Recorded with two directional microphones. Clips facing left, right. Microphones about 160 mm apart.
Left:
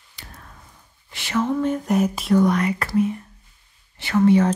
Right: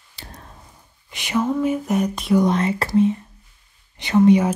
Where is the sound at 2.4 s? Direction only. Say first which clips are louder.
Right 1 dB; 25° right (ahead or behind).